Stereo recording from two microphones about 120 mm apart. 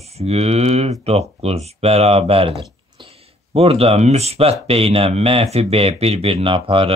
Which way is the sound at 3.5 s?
55° right (ahead or behind).